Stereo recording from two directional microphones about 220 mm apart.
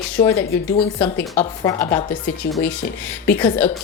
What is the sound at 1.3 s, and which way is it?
Speech, 30° left (ahead or behind).